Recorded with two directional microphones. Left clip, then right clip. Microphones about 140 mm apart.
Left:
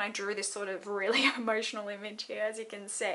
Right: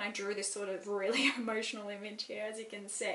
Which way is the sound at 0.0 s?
25° left (ahead or behind).